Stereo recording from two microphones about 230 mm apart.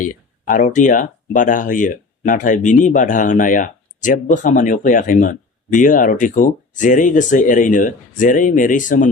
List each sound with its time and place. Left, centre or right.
0.0 s speech: left